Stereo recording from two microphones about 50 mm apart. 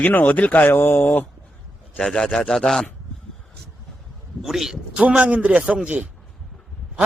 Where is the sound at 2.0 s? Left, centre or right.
Centre.